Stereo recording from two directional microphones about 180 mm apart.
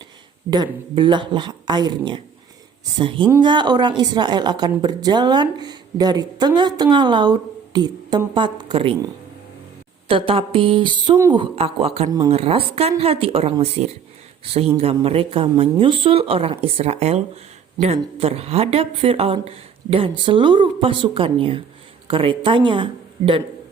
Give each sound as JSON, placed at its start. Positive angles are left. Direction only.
{"t": 0.5, "sound": "a woman's voice", "side_deg": -25}
{"t": 10.1, "sound": "a woman's voice", "side_deg": -30}